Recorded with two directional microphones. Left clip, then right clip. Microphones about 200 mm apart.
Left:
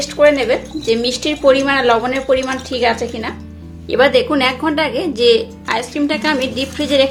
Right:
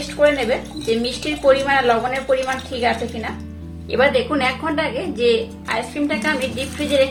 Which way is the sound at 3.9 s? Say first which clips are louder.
Left 4 dB; 40° left (ahead or behind).